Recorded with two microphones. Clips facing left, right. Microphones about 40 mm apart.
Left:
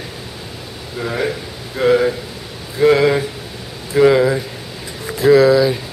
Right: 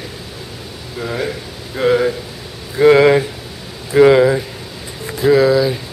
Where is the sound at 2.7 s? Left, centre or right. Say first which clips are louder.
Right 3 dB; centre.